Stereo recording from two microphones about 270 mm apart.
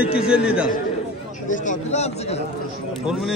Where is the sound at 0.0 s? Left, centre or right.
Centre.